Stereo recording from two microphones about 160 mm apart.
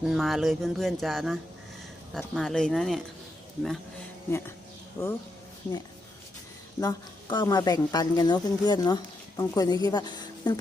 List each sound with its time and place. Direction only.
0.0 s speech: centre (ahead or behind)
4.3 s speech: 15° left (ahead or behind)
6.7 s speech: 25° left (ahead or behind)